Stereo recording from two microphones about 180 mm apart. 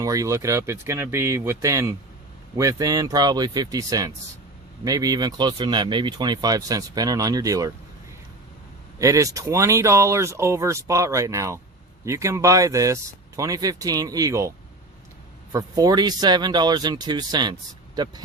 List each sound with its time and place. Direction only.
0.0 s speech: 20° right (ahead or behind)
9.0 s speech: 15° right (ahead or behind)
15.5 s speech: 20° right (ahead or behind)